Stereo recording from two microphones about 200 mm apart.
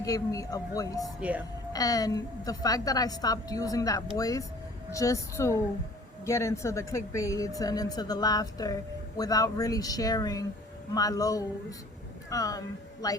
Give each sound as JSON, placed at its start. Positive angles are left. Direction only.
{"t": 0.0, "sound": "speech", "side_deg": 15}
{"t": 1.2, "sound": "a woman's voice", "side_deg": -5}
{"t": 1.7, "sound": "speech", "side_deg": 15}